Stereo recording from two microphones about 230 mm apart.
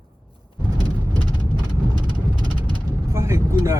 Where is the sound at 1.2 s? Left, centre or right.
Centre.